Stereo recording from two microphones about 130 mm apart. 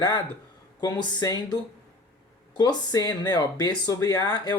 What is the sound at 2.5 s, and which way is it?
Speech, 35° left (ahead or behind).